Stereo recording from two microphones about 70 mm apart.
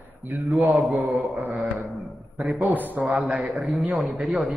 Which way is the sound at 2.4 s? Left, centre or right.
Centre.